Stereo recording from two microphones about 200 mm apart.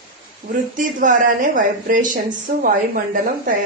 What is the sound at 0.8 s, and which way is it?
Speech, 40° right (ahead or behind).